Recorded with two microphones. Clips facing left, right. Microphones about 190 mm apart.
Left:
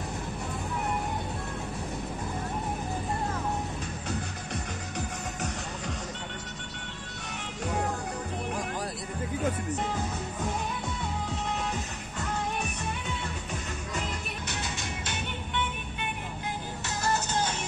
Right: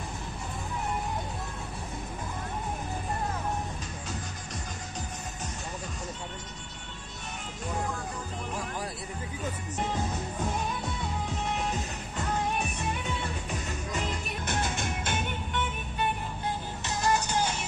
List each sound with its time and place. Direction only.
14.4 s music: 50° right (ahead or behind)
16.8 s music: 15° right (ahead or behind)